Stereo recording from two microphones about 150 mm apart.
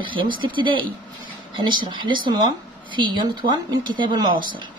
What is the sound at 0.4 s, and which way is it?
Speech, 35° right (ahead or behind).